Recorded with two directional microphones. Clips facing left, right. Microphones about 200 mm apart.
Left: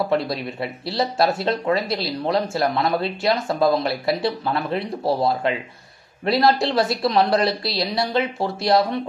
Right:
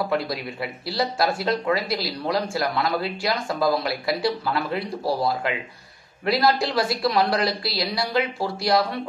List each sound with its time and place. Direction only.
0.1 s speech: 25° left (ahead or behind)